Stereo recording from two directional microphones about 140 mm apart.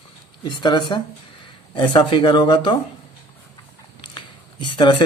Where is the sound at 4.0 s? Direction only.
35° left (ahead or behind).